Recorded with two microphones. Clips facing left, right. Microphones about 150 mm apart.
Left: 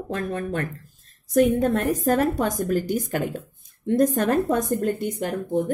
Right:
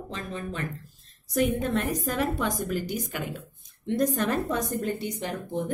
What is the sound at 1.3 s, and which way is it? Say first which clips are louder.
A woman's voice: left 7 dB; 45° left (ahead or behind).